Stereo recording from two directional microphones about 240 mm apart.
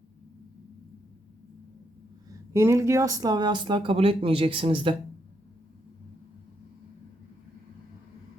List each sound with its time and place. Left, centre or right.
2.5 s speech: centre